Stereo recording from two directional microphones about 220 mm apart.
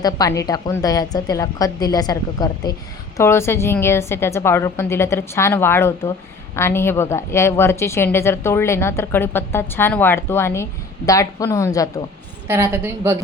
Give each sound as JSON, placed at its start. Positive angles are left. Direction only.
{"t": 0.0, "sound": "a woman's voice", "side_deg": 15}
{"t": 12.5, "sound": "a woman's voice", "side_deg": -10}